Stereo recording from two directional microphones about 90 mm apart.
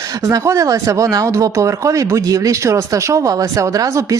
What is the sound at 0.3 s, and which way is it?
Speech, 40° right (ahead or behind).